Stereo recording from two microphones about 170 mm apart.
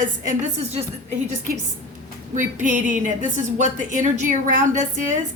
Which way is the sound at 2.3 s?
50° right (ahead or behind).